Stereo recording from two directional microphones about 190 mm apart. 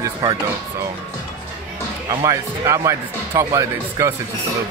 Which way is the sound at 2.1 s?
15° right (ahead or behind).